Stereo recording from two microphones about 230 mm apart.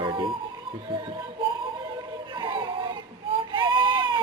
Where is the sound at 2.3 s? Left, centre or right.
Right.